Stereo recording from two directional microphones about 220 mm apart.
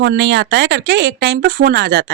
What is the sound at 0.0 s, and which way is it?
Speech, 50° right (ahead or behind).